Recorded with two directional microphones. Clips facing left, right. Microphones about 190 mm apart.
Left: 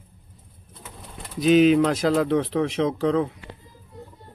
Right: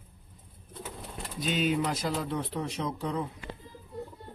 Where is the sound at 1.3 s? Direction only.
90° left.